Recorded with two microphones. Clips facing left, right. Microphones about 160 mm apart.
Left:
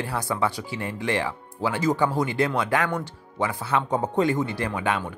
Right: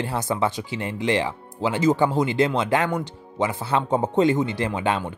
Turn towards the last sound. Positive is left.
turn(degrees=-25)  # may be behind; listen again after turning